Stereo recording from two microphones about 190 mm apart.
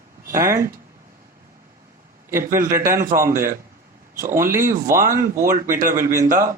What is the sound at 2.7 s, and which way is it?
Speech, 15° right (ahead or behind).